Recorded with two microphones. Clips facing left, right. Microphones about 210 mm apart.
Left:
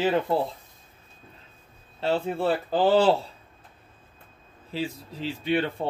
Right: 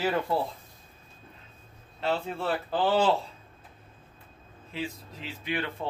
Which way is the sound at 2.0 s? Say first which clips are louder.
Left 5 dB; 30° left (ahead or behind).